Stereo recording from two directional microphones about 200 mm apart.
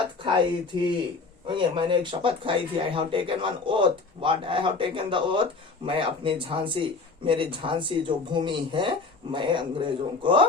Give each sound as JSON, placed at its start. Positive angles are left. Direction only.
{"t": 0.7, "sound": "speech", "side_deg": -25}